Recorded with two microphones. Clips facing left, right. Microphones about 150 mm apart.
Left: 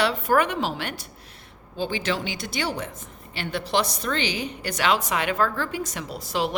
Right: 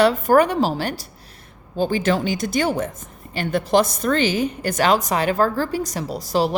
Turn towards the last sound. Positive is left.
turn(degrees=-40)  # may be behind; listen again after turning